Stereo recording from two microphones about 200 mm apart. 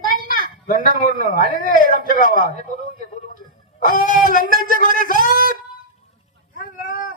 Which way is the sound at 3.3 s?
45° left (ahead or behind).